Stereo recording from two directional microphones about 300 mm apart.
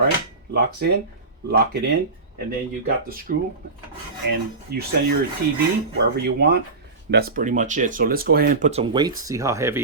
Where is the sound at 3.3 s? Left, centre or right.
Right.